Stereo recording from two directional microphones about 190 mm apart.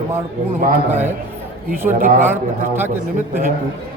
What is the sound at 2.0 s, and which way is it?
Speech, 45° right (ahead or behind).